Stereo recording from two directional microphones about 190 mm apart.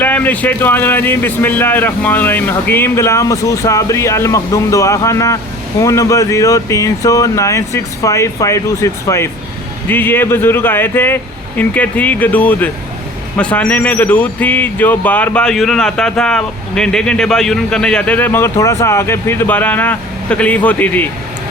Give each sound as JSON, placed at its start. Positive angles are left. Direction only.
{"t": 0.0, "sound": "speech", "side_deg": 10}